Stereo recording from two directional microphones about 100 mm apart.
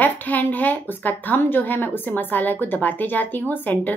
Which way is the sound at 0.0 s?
15° left (ahead or behind).